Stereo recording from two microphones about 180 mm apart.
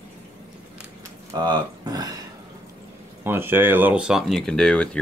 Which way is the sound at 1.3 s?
25° right (ahead or behind).